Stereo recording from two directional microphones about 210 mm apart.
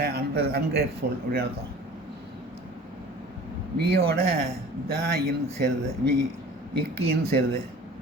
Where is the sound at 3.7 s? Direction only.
50° right (ahead or behind).